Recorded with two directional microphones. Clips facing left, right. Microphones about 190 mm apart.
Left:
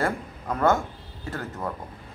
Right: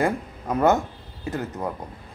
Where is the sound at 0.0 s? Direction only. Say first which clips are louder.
Right 3 dB; 20° right (ahead or behind).